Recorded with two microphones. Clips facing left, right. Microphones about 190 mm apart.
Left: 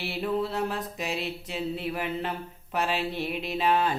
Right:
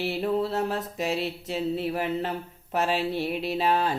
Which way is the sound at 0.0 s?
40° right (ahead or behind).